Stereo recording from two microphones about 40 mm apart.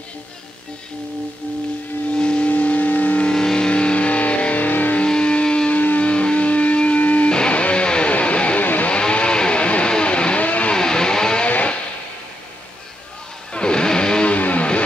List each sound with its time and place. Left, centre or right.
2.1 s a sound: left
2.5 s a sound: left
3.3 s vehicle: centre
4.6 s music: left
5.0 s music: left
5.7 s music: left
6.0 s music: left
7.2 s music: left
8.5 s music: left
8.9 s vehicle: left
10.7 s music: centre
11.4 s music: left
13.5 s music: left
14.3 s music: left